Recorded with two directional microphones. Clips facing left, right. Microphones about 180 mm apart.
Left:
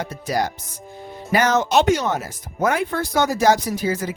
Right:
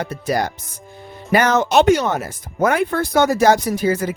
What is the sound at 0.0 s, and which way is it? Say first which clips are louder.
Speech: right 2 dB; 60° right (ahead or behind).